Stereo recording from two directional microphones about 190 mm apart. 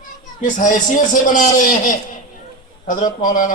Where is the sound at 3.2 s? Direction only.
45° left (ahead or behind).